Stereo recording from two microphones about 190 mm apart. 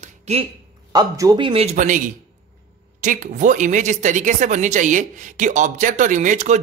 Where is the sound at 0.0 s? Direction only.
35° right (ahead or behind).